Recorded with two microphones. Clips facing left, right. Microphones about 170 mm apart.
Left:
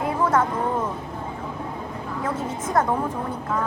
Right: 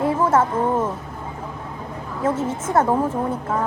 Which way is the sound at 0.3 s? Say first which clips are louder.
Right 3 dB; 25° right (ahead or behind).